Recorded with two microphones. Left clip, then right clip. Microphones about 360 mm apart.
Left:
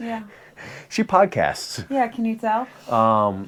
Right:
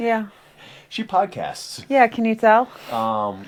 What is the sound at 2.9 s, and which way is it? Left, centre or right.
Speech, left.